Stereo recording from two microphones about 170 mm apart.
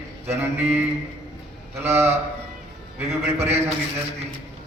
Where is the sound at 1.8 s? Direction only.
15° right (ahead or behind).